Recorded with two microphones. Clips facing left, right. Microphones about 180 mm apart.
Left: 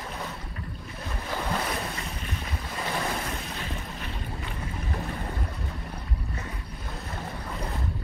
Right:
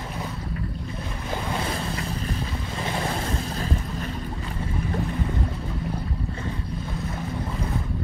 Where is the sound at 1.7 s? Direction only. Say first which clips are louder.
Right 4 dB; 35° right (ahead or behind).